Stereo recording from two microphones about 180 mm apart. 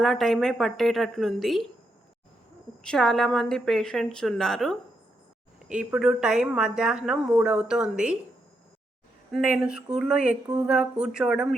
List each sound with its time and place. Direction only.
0.0 s speech: centre (ahead or behind)
2.8 s speech: 5° left (ahead or behind)
9.3 s speech: 5° right (ahead or behind)